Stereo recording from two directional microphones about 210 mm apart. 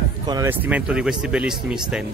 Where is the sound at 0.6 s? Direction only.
5° right (ahead or behind).